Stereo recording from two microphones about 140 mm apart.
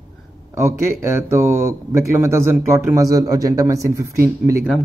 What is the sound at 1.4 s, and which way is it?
Speech, 20° right (ahead or behind).